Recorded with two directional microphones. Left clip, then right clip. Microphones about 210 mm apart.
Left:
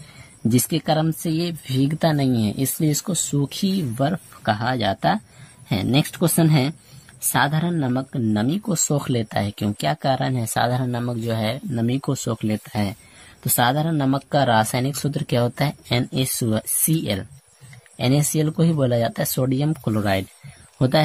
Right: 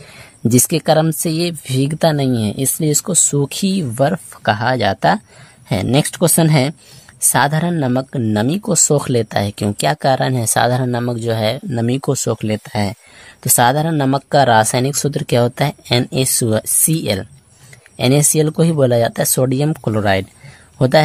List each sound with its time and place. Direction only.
0.5 s speech: 45° right (ahead or behind)